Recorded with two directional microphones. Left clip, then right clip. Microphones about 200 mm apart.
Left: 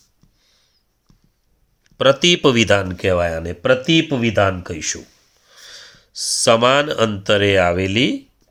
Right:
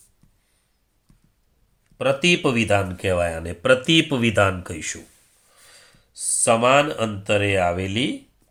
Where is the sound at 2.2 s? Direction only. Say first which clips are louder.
Left 5 dB; 45° left (ahead or behind); by 4.9 s 30° left (ahead or behind).